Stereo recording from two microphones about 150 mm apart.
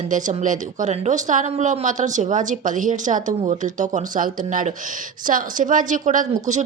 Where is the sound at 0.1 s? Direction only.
60° right (ahead or behind).